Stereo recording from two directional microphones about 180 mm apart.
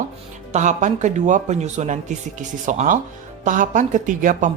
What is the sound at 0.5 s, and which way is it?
A man's voice, 40° right (ahead or behind).